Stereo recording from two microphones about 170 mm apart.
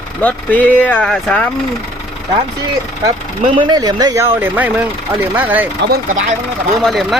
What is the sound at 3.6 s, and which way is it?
Speech, 25° right (ahead or behind).